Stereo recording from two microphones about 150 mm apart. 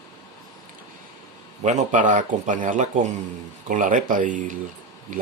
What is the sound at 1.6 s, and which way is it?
Speech, 55° right (ahead or behind).